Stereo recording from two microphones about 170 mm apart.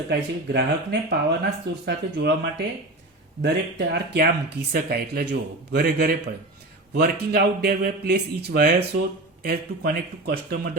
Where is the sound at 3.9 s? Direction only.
80° right.